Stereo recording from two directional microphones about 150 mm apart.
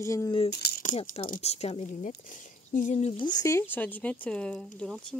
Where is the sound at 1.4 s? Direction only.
45° left (ahead or behind); by 3.6 s 25° left (ahead or behind).